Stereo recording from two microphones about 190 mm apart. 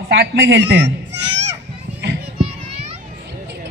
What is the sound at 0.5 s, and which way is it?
Speech, 65° right (ahead or behind).